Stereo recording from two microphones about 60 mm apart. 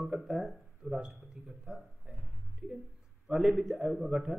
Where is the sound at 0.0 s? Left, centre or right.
Centre.